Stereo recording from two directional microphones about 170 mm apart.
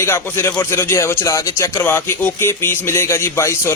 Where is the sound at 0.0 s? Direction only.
15° left (ahead or behind).